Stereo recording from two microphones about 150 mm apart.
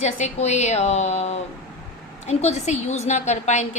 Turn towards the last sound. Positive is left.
turn(degrees=50)  # may be behind; listen again after turning